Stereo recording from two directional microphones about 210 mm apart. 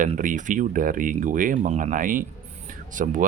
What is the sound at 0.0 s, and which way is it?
Speech, 40° right (ahead or behind).